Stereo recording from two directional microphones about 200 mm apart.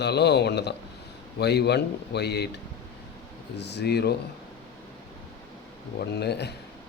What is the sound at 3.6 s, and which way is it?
Speech, 55° left (ahead or behind).